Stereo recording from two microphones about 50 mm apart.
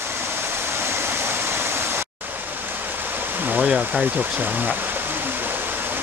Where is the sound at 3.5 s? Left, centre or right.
Centre.